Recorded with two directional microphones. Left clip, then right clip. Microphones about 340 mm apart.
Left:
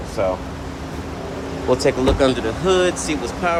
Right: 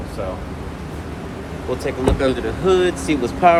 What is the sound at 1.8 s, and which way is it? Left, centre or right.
Speech, centre.